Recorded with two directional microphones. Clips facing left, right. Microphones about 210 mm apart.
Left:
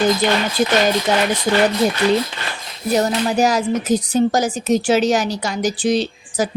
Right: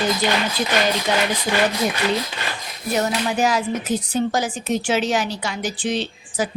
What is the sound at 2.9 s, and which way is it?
A woman's voice, 35° left (ahead or behind).